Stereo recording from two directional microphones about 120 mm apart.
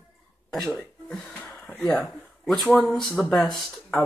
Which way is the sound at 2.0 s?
5° left (ahead or behind).